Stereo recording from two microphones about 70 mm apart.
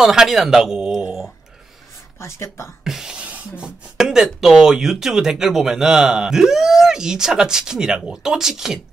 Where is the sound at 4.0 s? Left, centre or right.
Centre.